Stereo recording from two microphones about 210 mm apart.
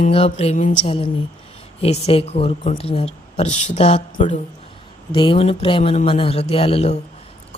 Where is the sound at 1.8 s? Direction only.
30° left (ahead or behind).